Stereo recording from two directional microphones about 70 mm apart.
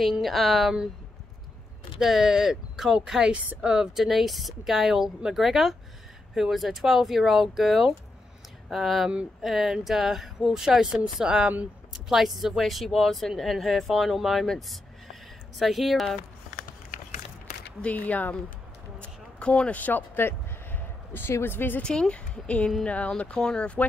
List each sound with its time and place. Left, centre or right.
0.0 s speech: centre
2.0 s speech: centre
17.8 s speech: left
18.9 s a sound: centre
19.8 s speech: left
21.8 s speech: centre